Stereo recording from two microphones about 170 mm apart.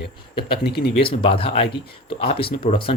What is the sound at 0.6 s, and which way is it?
Speech, 70° left (ahead or behind).